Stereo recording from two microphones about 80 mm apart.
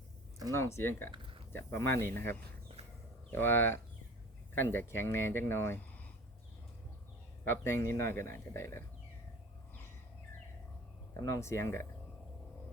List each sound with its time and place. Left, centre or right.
0.5 s speech: left
7.4 s speech: left
11.3 s speech: left